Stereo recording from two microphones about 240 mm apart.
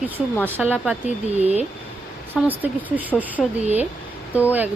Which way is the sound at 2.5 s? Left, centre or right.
Centre.